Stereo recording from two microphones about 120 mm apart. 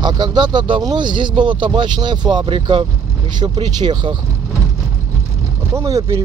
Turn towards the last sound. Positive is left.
turn(degrees=-25)  # may be behind; listen again after turning